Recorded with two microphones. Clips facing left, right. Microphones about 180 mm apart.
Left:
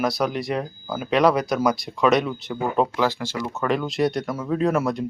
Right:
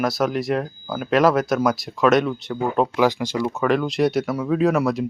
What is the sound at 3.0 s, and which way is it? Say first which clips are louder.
Speech: right 4 dB; 15° right (ahead or behind).